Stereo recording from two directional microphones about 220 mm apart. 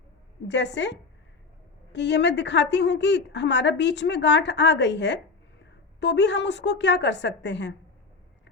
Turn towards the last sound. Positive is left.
turn(degrees=50)  # may be behind; listen again after turning